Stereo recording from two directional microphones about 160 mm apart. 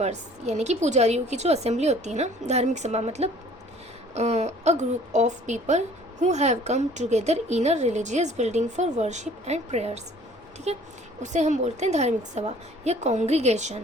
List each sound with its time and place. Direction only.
0.0 s a woman's voice: 45° right (ahead or behind)